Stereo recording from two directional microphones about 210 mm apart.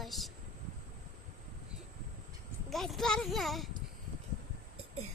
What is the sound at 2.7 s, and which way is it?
Speech, centre (ahead or behind).